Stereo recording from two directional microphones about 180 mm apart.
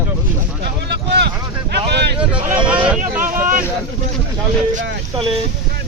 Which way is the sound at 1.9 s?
70° right (ahead or behind).